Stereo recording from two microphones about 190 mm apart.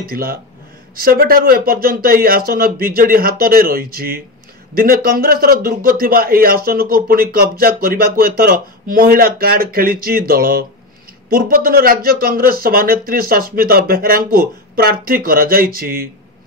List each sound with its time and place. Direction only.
0.1 s speech: 50° right (ahead or behind)